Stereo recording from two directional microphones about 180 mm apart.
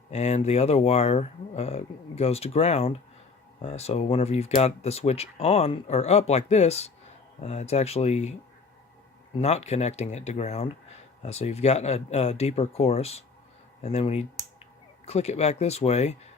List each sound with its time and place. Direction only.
0.1 s speech: 40° left (ahead or behind)
9.4 s speech: 35° left (ahead or behind)